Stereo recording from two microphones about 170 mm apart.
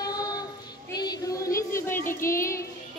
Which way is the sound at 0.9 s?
25° left (ahead or behind).